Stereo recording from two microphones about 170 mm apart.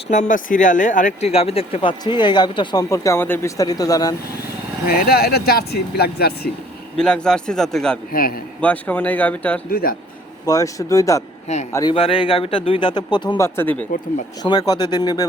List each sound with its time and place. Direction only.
0.1 s speech: 50° left (ahead or behind); by 4.1 s 20° left (ahead or behind)
4.9 s speech: 60° left (ahead or behind)
6.9 s a man's voice: 5° left (ahead or behind)
8.1 s speech: 60° left (ahead or behind)
8.6 s speech: 10° left (ahead or behind)
9.6 s speech: 60° left (ahead or behind)
10.4 s speech: 20° left (ahead or behind)
11.9 s speech: 35° left (ahead or behind)
13.3 s speech: 15° left (ahead or behind)
14.4 s speech: 25° left (ahead or behind)